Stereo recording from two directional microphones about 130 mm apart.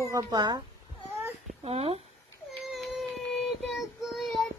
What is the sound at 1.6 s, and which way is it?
Speech, 50° right (ahead or behind).